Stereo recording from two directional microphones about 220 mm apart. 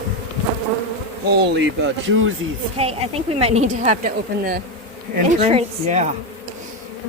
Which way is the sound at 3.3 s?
30° right (ahead or behind).